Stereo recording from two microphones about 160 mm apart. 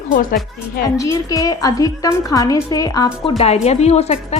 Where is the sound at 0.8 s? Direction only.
20° left (ahead or behind).